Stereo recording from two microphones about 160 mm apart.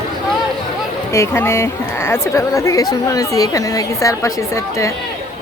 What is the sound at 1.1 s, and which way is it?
A woman's voice, 15° left (ahead or behind).